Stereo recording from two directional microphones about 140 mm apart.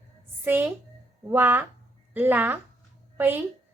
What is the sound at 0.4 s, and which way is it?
A child's voice, 15° right (ahead or behind).